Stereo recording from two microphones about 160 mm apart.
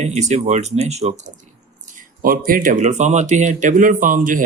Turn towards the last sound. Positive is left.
turn(degrees=-55)  # may be behind; listen again after turning